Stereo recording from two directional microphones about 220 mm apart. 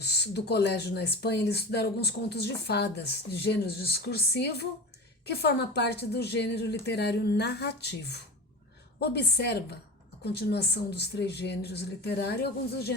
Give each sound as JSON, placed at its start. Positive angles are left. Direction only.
{"t": 0.0, "sound": "speech", "side_deg": 50}